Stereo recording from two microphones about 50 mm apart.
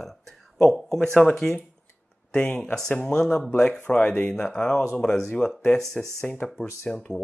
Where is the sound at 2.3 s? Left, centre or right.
Centre.